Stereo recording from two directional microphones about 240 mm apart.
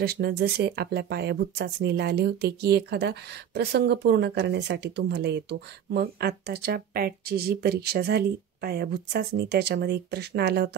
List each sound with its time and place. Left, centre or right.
0.0 s speech: right